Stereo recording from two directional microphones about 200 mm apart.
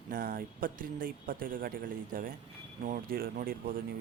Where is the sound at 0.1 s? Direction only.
45° right (ahead or behind).